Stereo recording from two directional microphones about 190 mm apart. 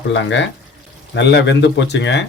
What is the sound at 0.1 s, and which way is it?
Speech, 70° left (ahead or behind).